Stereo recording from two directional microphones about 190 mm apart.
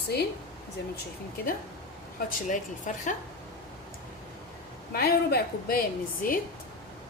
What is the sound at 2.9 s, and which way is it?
Speech, 40° left (ahead or behind).